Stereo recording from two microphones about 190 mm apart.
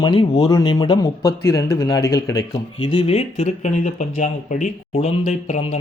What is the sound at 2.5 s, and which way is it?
Speech, 25° left (ahead or behind).